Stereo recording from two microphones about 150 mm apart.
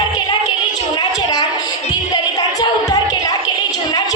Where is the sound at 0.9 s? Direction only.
25° left (ahead or behind).